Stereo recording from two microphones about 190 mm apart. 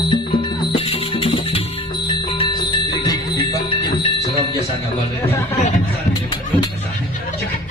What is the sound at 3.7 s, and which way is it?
Jingle bell, 20° left (ahead or behind).